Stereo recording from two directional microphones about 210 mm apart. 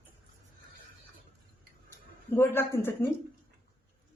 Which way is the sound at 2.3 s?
10° left (ahead or behind).